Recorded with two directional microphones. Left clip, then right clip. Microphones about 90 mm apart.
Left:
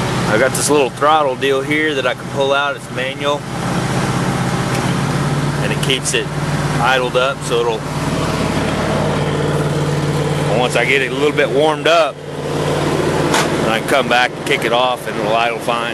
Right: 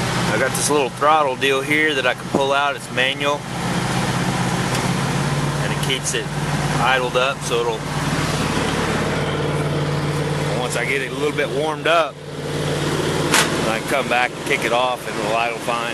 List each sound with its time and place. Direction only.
0.3 s speech: centre (ahead or behind)
6.8 s speech: 5° left (ahead or behind)
10.5 s speech: 40° left (ahead or behind)
11.3 s speech: 10° left (ahead or behind)
12.8 s a sound: centre (ahead or behind)
13.8 s speech: 15° left (ahead or behind)